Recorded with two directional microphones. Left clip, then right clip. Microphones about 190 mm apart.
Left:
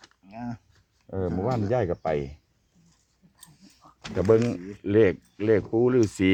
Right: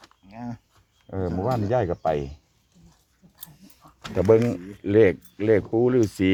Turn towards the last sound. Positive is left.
turn(degrees=5)  # may be behind; listen again after turning